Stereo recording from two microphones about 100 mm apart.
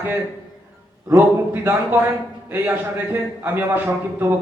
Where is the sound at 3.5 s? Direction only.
20° right (ahead or behind).